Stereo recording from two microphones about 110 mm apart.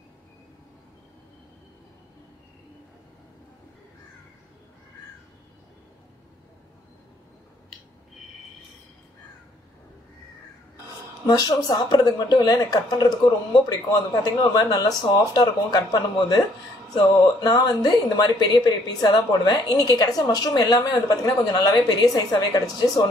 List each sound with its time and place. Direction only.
11.2 s a woman's voice: 35° left (ahead or behind)
14.2 s a woman's voice: 35° left (ahead or behind)